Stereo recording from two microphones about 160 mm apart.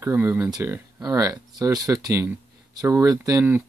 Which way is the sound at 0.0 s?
10° right (ahead or behind).